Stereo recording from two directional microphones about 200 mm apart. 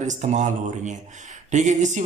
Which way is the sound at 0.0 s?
35° right (ahead or behind).